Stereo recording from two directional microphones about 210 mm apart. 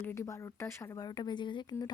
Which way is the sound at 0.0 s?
10° left (ahead or behind).